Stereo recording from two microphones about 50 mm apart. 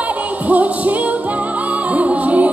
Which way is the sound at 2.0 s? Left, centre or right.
Right.